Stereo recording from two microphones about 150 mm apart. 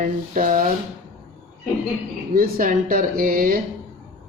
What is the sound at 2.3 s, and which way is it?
Speech, 70° right (ahead or behind).